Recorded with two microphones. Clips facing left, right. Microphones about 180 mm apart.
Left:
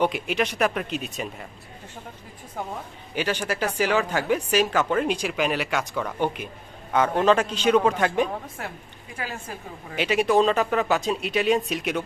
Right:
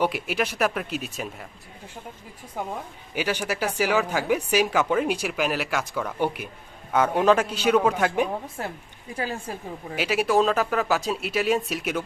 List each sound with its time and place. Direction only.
0.0 s speech: 5° right (ahead or behind)
3.2 s speech: 10° right (ahead or behind)
9.1 s a woman's voice: 35° right (ahead or behind)
9.9 s speech: 5° right (ahead or behind)